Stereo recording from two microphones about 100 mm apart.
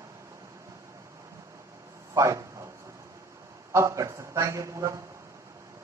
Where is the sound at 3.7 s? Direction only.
30° right (ahead or behind).